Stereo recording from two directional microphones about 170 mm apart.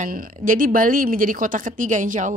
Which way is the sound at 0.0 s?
50° right (ahead or behind).